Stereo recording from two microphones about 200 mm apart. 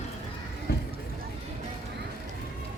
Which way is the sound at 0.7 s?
50° left (ahead or behind).